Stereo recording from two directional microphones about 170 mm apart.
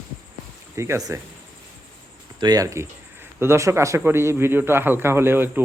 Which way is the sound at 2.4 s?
20° right (ahead or behind).